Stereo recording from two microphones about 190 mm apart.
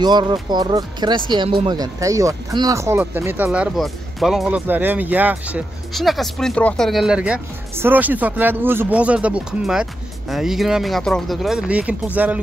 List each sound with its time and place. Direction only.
0.0 s speech: 20° right (ahead or behind)